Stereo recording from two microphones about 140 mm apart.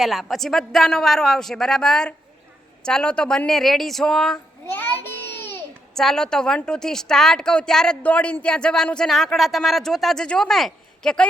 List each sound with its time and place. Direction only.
0.0 s a woman's voice: centre (ahead or behind)
4.6 s a sound: 15° left (ahead or behind)
5.9 s a woman's voice: 5° left (ahead or behind)